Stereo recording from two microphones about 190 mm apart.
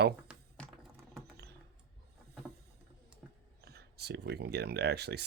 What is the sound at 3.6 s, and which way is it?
Speech, 55° right (ahead or behind).